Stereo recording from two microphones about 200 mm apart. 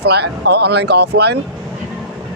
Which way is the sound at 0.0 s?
55° right (ahead or behind).